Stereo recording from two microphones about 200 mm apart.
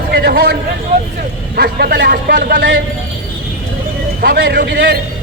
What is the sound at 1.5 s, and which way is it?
A man's voice, 50° right (ahead or behind).